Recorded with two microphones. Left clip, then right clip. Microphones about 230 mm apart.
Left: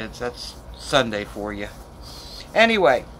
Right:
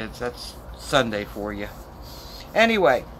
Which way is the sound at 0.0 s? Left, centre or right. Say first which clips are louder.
Left 1 dB; centre.